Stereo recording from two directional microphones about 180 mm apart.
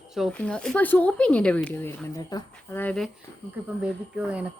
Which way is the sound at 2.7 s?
10° left (ahead or behind).